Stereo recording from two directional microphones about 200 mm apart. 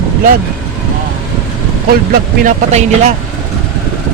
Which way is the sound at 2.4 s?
35° right (ahead or behind).